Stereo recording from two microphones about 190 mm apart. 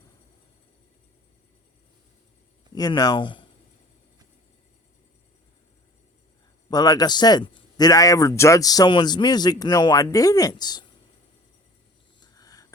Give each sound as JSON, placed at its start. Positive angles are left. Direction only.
{"t": 2.7, "sound": "a man's voice", "side_deg": 20}
{"t": 6.7, "sound": "a man's voice", "side_deg": 20}
{"t": 12.2, "sound": "a sound", "side_deg": 20}